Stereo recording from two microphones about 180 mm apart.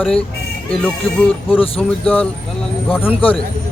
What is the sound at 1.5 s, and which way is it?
Speech, 30° left (ahead or behind).